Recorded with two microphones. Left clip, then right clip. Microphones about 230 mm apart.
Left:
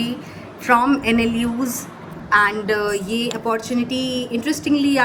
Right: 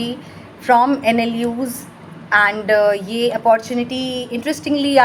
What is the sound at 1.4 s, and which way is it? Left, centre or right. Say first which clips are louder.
A woman's voice: right 2 dB; centre.